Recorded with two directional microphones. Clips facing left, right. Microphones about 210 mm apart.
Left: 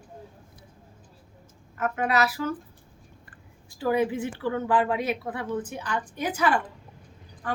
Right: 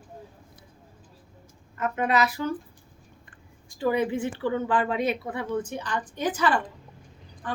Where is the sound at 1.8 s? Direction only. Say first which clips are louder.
Even; 5° left (ahead or behind).